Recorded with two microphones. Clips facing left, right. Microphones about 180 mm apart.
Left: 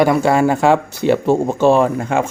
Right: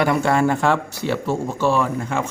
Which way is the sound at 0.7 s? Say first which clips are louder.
Left 8 dB; 55° left (ahead or behind).